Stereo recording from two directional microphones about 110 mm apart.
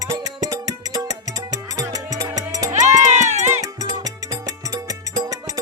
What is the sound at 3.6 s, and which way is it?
Music, 35° right (ahead or behind).